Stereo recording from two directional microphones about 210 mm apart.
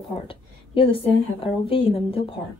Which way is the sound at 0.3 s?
25° left (ahead or behind).